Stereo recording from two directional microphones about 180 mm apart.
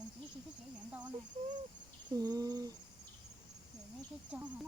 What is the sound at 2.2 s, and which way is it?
Speech, 20° right (ahead or behind).